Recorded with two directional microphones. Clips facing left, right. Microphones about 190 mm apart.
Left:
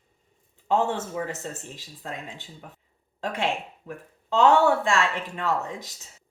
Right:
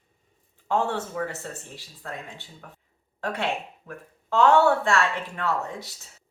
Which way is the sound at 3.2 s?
15° left (ahead or behind).